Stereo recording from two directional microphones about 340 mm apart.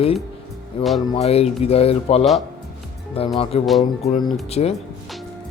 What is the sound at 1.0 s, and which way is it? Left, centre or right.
Speech, centre.